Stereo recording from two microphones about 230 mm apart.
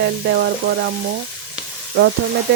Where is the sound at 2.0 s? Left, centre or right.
Right.